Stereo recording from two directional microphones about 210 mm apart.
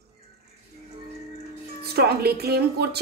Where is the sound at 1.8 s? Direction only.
50° right (ahead or behind).